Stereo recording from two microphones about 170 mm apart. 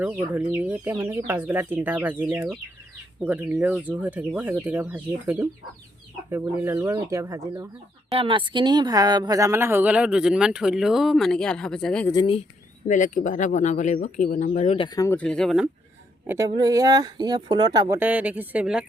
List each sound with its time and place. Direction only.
0.0 s speech: 10° right (ahead or behind)
8.1 s speech: 30° right (ahead or behind); by 12.0 s 5° left (ahead or behind)
12.2 s speech: 35° left (ahead or behind)
12.9 s speech: 50° left (ahead or behind)
14.8 s speech: 20° left (ahead or behind); by 15.7 s centre (ahead or behind)
16.2 s speech: 15° right (ahead or behind)